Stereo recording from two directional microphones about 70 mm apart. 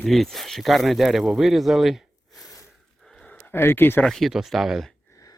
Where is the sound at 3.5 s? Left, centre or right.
Left.